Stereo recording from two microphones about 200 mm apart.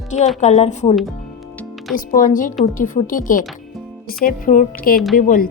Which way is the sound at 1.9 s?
40° left (ahead or behind).